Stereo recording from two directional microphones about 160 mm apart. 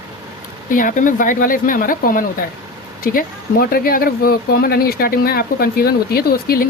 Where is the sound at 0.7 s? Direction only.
55° left (ahead or behind).